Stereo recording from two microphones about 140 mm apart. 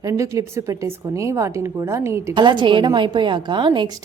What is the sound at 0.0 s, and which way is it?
A woman's voice, 25° right (ahead or behind).